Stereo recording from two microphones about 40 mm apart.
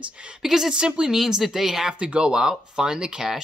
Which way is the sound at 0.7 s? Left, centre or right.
Right.